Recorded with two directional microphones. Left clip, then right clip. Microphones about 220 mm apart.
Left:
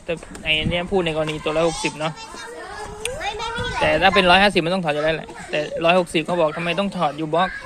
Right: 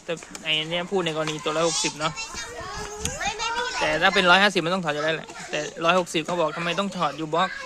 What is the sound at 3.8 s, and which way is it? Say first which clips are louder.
Speech: left 4 dB; 10° right (ahead or behind).